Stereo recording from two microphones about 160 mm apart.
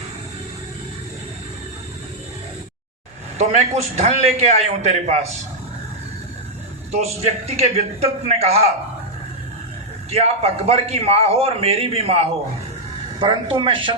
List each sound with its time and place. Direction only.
3.3 s a man's voice: 40° right (ahead or behind)
6.9 s a man's voice: 40° right (ahead or behind)
10.1 s a man's voice: 40° right (ahead or behind)